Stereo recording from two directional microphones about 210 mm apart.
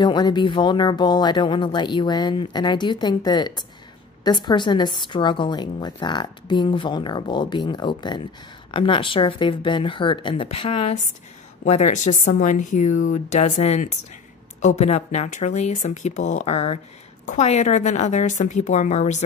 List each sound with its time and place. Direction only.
0.0 s a woman's voice: 20° left (ahead or behind)